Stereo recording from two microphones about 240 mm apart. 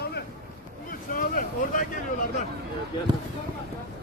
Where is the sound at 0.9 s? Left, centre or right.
Left.